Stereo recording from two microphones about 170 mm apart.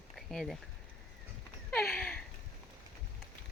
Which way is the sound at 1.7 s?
5° left (ahead or behind).